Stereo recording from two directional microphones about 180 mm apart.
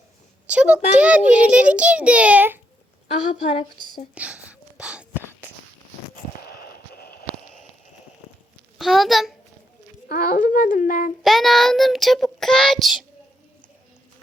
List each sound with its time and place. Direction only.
0.4 s a child's voice: 5° right (ahead or behind)
3.1 s a woman's voice: 35° left (ahead or behind)
4.1 s a sound: 10° right (ahead or behind)
6.5 s a sound: 55° left (ahead or behind)
8.8 s child singing: centre (ahead or behind)
10.1 s a child's voice: 50° left (ahead or behind)
11.2 s child singing: centre (ahead or behind)